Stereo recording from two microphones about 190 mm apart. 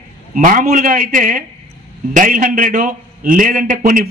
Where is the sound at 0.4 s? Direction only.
45° right (ahead or behind).